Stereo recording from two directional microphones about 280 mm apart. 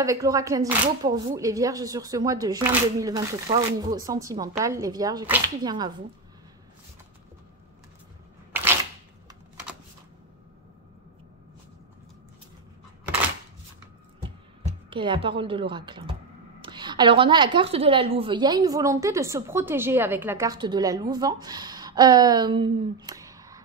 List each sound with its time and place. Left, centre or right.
0.0 s a woman's voice: centre
14.9 s a woman's voice: centre